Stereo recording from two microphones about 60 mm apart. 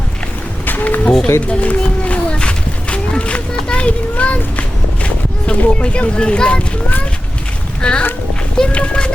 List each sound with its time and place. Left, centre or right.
0.6 s music: left
1.5 s a sound: centre
5.5 s speech: centre
7.8 s speech: centre